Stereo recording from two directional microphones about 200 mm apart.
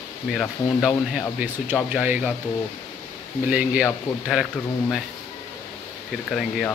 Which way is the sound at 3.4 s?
5° right (ahead or behind).